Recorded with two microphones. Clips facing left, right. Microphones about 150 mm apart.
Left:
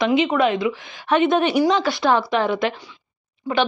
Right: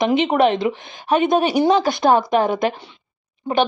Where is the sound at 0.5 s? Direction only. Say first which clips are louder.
Right 1 dB; 30° right (ahead or behind).